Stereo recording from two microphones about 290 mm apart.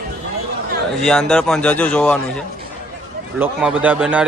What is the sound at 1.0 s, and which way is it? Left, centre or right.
A man's voice, centre.